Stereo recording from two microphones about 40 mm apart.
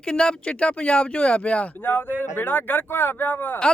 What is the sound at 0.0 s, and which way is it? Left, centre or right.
Speech, left.